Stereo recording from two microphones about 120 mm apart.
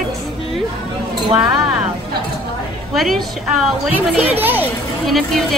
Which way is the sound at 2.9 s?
Centre (ahead or behind).